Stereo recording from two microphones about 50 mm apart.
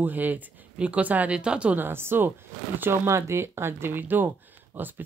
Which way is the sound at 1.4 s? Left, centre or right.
Right.